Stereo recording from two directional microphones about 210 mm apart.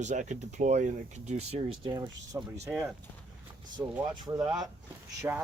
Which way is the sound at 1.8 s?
20° right (ahead or behind).